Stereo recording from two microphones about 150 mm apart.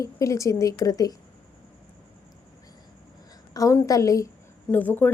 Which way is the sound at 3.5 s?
20° left (ahead or behind).